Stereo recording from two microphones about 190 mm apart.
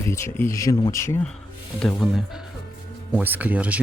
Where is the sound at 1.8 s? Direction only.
Centre (ahead or behind).